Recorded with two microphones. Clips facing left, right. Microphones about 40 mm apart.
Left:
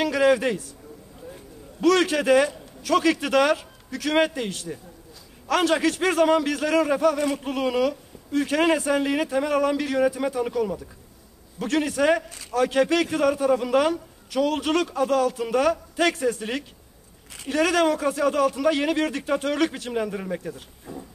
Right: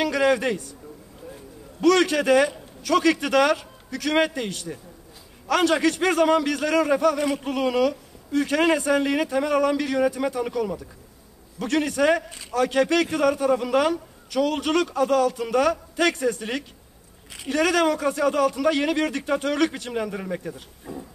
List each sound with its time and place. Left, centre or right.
0.0 s a man's voice: centre
1.8 s a man's voice: centre
12.3 s a man's voice: right
12.5 s a man's voice: centre